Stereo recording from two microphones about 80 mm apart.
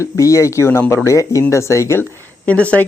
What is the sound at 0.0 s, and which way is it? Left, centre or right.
Speech, left.